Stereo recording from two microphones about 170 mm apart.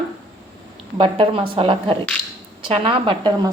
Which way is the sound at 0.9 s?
30° right (ahead or behind).